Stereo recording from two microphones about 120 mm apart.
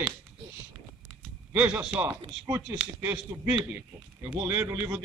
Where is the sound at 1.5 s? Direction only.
10° right (ahead or behind).